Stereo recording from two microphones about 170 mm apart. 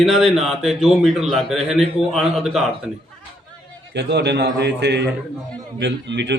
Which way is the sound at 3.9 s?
85° right.